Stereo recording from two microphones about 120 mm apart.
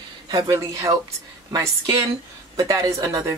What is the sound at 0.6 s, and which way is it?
Speech, 25° right (ahead or behind).